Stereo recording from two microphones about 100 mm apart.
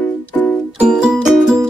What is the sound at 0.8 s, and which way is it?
Music, 10° right (ahead or behind).